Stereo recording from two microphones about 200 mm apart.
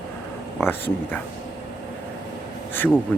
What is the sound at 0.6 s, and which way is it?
Speech, 10° left (ahead or behind).